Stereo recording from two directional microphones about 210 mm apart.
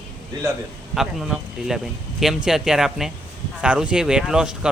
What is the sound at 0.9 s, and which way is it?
Speech, centre (ahead or behind).